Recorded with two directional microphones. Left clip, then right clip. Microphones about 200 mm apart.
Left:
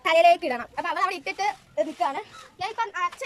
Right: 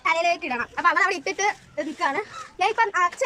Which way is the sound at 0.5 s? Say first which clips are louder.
Right 3 dB; 25° left (ahead or behind).